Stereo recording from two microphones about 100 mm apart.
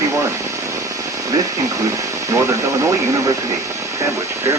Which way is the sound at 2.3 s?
30° right (ahead or behind).